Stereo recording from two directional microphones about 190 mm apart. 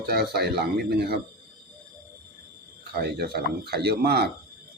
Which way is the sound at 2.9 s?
60° right (ahead or behind).